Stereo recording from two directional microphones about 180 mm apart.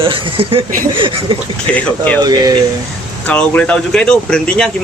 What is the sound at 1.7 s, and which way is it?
Speech, 5° left (ahead or behind).